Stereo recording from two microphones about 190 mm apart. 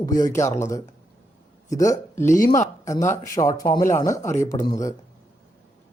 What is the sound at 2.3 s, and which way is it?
Speech, 40° left (ahead or behind).